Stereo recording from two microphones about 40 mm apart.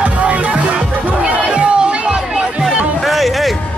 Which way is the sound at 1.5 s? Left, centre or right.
Right.